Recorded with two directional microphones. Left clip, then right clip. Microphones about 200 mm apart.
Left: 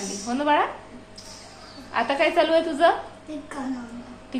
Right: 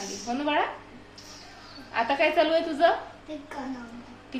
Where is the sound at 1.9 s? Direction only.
10° left (ahead or behind).